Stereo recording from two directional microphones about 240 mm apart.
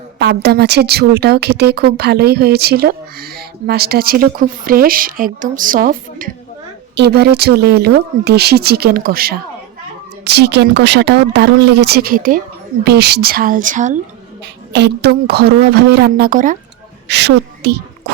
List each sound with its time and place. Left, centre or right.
0.2 s a woman's voice: right
14.4 s a woman's voice: right
17.1 s speech: right